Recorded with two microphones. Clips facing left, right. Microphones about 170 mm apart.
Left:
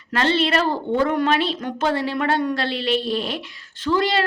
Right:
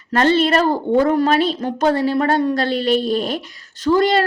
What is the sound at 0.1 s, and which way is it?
A woman's voice, 45° right (ahead or behind).